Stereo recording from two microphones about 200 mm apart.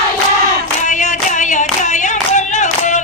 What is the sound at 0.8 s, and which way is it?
Clapping, 40° left (ahead or behind).